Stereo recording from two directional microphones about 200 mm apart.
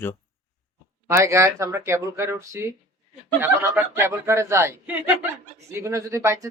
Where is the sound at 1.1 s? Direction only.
15° right (ahead or behind).